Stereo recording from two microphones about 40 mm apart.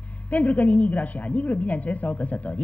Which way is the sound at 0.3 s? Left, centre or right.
Left.